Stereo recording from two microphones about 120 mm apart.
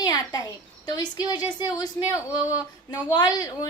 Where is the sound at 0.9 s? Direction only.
35° left (ahead or behind).